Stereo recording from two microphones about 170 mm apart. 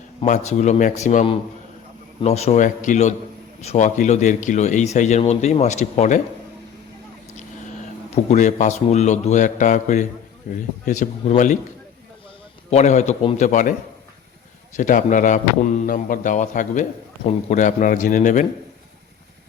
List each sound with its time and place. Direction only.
0.2 s speech: 45° left (ahead or behind)
8.1 s speech: 40° left (ahead or behind)
12.7 s speech: 45° left (ahead or behind)
14.8 s speech: 50° left (ahead or behind)